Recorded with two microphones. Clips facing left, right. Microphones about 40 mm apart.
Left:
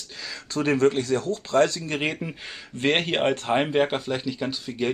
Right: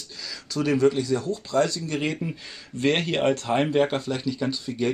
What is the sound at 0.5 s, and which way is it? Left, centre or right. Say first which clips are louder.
Speech: even; left.